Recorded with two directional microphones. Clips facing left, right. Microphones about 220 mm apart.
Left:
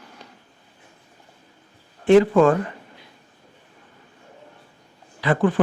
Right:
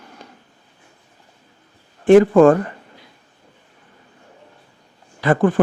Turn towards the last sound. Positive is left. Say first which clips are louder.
# right 4 dB
turn(degrees=-50)  # may be behind; listen again after turning